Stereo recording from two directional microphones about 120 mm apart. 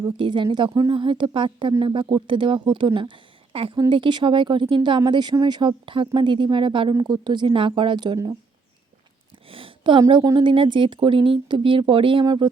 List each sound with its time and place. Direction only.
0.2 s speech: 40° right (ahead or behind)
9.5 s a sound: 50° right (ahead or behind)
10.2 s speech: 40° right (ahead or behind)